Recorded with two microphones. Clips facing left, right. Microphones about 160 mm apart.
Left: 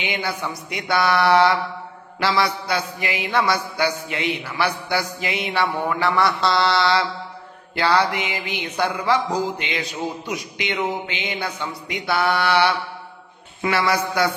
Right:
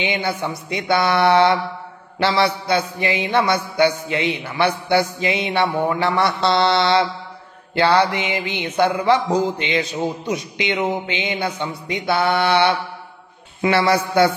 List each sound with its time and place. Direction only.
0.0 s speech: 25° right (ahead or behind)